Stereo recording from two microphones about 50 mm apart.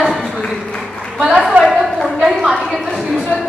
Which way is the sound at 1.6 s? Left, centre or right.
Centre.